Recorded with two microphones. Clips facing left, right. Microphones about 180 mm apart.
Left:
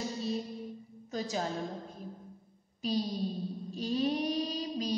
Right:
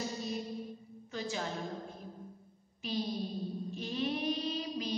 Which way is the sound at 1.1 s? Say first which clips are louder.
Left 3 dB; 40° left (ahead or behind).